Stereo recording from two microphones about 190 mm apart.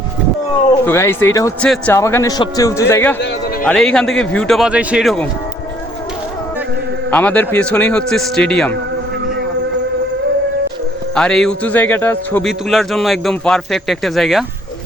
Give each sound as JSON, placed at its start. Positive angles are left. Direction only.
{"t": 0.9, "sound": "a man's voice", "side_deg": 10}
{"t": 1.6, "sound": "a man's voice", "side_deg": 5}
{"t": 7.1, "sound": "a man's voice", "side_deg": 10}
{"t": 11.1, "sound": "a man's voice", "side_deg": 5}